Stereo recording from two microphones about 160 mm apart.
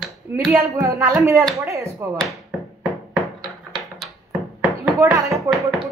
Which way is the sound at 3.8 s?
Centre (ahead or behind).